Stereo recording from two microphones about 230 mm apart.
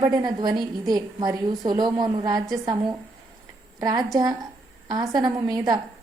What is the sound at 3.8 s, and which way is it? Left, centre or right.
A woman's voice, centre.